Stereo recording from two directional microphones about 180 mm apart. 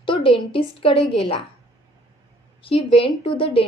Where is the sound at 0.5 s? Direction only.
30° left (ahead or behind).